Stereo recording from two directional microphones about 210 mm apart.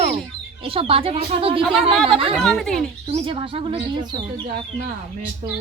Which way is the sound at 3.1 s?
30° right (ahead or behind).